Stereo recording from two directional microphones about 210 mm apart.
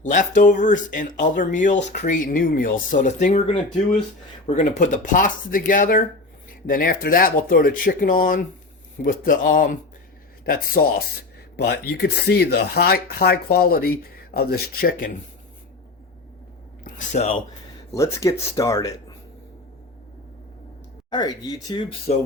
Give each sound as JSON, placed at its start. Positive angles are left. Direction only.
{"t": 0.0, "sound": "speech", "side_deg": 35}
{"t": 16.8, "sound": "speech", "side_deg": 35}
{"t": 17.9, "sound": "speech", "side_deg": 15}
{"t": 21.1, "sound": "speech", "side_deg": 20}